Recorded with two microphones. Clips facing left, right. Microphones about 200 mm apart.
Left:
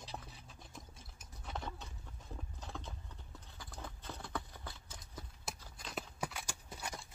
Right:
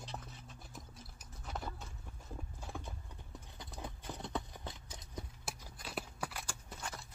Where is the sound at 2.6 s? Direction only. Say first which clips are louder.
Right 1 dB; 10° right (ahead or behind).